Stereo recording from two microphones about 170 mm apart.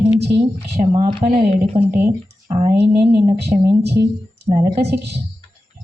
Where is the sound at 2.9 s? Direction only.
10° right (ahead or behind).